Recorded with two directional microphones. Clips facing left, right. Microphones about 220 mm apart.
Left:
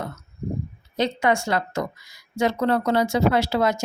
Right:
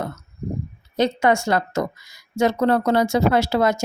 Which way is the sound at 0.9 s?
45° right (ahead or behind).